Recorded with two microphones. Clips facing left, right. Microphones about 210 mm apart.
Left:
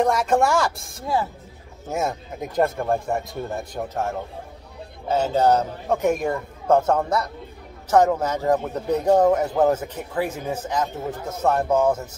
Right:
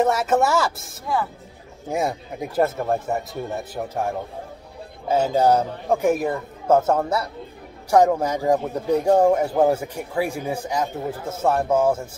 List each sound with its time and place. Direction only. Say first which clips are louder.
0.0 s speech: even; 5° right (ahead or behind)
1.0 s speech: left 1 dB; 25° left (ahead or behind)
1.9 s speech: right 1 dB; 10° right (ahead or behind)
5.0 s speech: right 1 dB; 10° right (ahead or behind)